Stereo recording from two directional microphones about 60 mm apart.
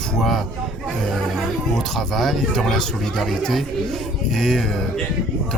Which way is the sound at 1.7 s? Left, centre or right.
Centre.